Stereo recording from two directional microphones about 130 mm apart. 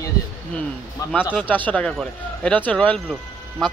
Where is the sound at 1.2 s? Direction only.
15° left (ahead or behind).